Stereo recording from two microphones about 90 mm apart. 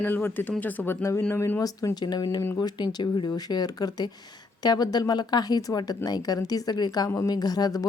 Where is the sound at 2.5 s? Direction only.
50° left (ahead or behind).